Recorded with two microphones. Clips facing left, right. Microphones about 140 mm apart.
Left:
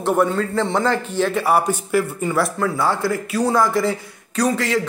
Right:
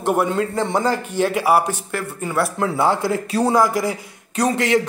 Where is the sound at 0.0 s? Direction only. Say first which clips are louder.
Left 1 dB; 10° right (ahead or behind).